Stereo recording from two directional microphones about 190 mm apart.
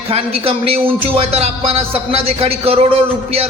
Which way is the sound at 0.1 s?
30° right (ahead or behind).